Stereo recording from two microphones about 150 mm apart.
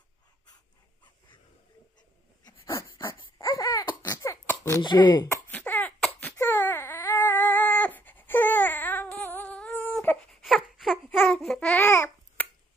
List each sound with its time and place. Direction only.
2.4 s dog: 20° left (ahead or behind)
3.2 s baby cry: 25° left (ahead or behind)
4.0 s a sound: 20° left (ahead or behind)
4.8 s speech: 30° left (ahead or behind)
5.5 s baby cry: 10° left (ahead or behind)
11.1 s babbling: 10° left (ahead or behind)